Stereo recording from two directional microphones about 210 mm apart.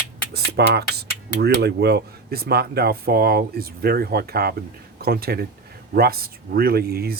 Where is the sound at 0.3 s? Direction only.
50° right (ahead or behind).